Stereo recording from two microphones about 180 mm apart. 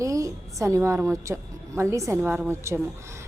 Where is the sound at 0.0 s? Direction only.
15° right (ahead or behind).